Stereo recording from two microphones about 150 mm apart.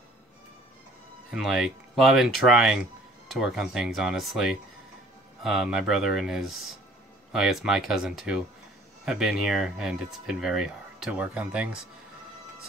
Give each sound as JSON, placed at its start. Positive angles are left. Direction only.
{"t": 1.3, "sound": "speech", "side_deg": -5}